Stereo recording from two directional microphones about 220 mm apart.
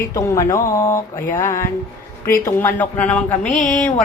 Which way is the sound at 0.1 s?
15° left (ahead or behind).